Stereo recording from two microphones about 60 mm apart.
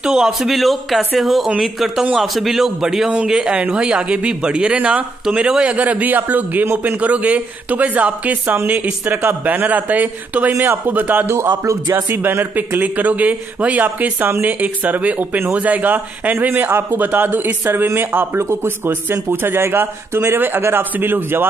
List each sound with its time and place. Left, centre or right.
0.0 s speech: centre
3.5 s a man's voice: right
11.2 s speech: right
11.9 s a man's voice: right
18.4 s a man's voice: right